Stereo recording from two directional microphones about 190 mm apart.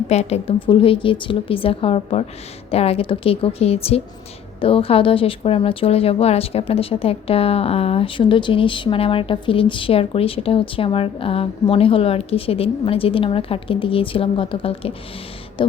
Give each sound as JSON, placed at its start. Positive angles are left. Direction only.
{"t": 0.1, "sound": "a woman's voice", "side_deg": 35}